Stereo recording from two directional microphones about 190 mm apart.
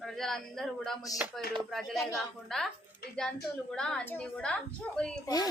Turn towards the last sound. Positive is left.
turn(degrees=20)  # may be behind; listen again after turning